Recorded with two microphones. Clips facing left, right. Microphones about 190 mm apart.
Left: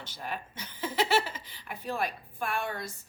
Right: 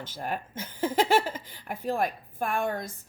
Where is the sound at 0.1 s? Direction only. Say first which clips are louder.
Right 4 dB; 50° right (ahead or behind).